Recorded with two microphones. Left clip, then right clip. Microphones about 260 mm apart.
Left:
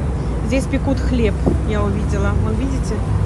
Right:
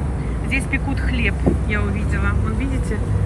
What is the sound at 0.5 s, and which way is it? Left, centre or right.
Speech, centre.